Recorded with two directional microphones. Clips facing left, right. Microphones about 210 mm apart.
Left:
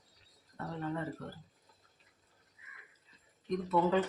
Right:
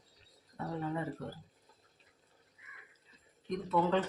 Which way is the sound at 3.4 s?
Centre (ahead or behind).